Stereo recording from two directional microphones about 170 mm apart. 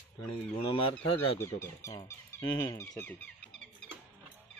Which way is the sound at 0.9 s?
15° left (ahead or behind).